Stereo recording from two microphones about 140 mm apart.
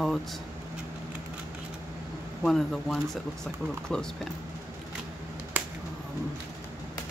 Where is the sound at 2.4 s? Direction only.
Centre (ahead or behind).